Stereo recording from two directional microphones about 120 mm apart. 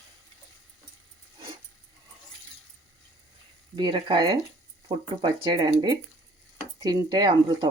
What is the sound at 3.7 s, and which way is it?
Speech, 40° right (ahead or behind).